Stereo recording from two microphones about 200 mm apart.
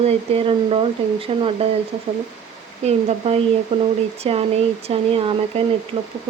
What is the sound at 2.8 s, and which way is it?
Speech, 30° right (ahead or behind).